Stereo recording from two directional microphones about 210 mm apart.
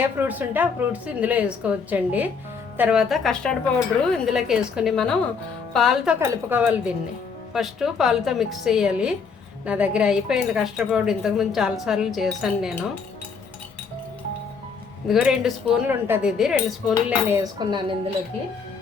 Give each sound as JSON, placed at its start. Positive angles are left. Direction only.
{"t": 0.2, "sound": "a woman's voice", "side_deg": -10}
{"t": 6.1, "sound": "a woman's voice", "side_deg": -10}
{"t": 15.0, "sound": "speech", "side_deg": 0}
{"t": 17.1, "sound": "speech", "side_deg": -15}